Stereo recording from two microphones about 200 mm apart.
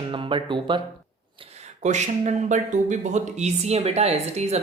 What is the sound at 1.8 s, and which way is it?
Speech, 35° right (ahead or behind).